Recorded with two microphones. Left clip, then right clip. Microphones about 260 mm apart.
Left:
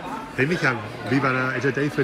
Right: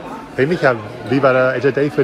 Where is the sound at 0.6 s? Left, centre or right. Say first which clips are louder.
Right 8 dB; centre.